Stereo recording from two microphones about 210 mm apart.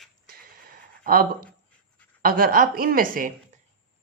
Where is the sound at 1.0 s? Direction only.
45° right (ahead or behind).